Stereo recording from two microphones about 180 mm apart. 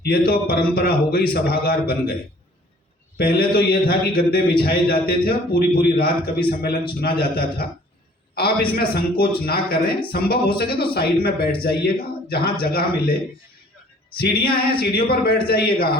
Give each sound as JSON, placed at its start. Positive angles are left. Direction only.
{"t": 0.0, "sound": "a man's voice", "side_deg": 60}
{"t": 3.2, "sound": "a man's voice", "side_deg": 55}
{"t": 8.7, "sound": "a man's voice", "side_deg": 55}
{"t": 14.2, "sound": "a man's voice", "side_deg": 55}